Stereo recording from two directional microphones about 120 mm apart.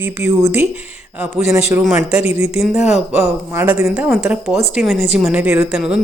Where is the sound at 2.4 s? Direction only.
5° right (ahead or behind).